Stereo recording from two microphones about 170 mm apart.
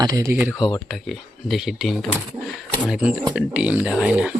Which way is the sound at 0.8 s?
Centre (ahead or behind).